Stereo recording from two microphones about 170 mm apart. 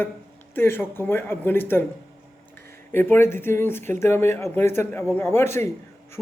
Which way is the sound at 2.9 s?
10° left (ahead or behind).